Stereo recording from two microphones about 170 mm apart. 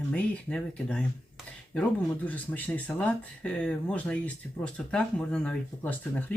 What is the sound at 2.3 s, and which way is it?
Speech, 10° left (ahead or behind).